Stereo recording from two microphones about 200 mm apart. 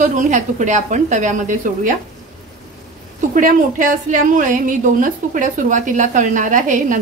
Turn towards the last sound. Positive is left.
turn(degrees=-40)  # may be behind; listen again after turning